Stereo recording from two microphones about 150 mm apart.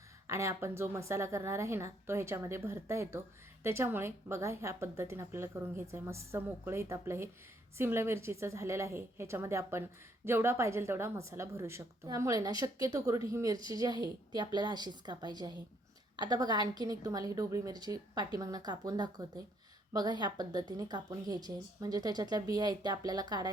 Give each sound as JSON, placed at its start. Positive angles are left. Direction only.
{"t": 0.3, "sound": "a woman's voice", "side_deg": -20}